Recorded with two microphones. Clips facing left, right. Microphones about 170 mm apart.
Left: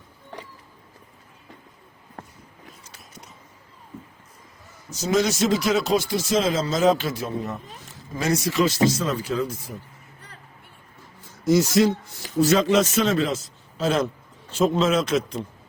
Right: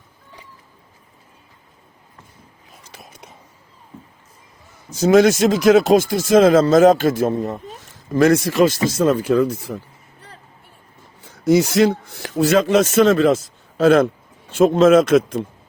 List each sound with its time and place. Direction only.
4.9 s speech: 55° right (ahead or behind)
11.2 s speech: 65° right (ahead or behind)